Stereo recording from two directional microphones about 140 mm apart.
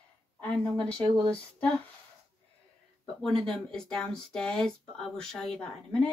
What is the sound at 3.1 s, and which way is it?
Speech, 5° left (ahead or behind).